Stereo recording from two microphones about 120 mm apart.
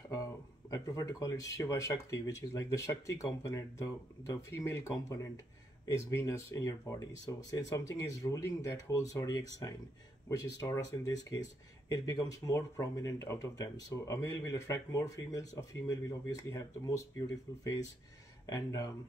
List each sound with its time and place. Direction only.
0.7 s speech: 30° left (ahead or behind)
18.5 s speech: 30° left (ahead or behind)